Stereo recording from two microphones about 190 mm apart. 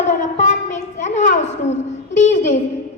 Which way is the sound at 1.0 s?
40° left (ahead or behind).